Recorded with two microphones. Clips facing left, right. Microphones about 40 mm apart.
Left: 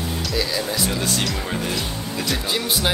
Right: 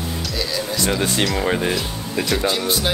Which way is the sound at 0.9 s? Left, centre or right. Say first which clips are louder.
Right 4 dB; right.